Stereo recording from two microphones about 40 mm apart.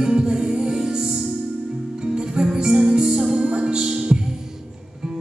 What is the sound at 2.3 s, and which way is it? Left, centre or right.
Music, centre.